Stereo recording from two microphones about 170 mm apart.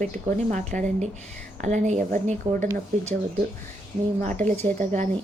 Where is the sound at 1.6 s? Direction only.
45° right (ahead or behind).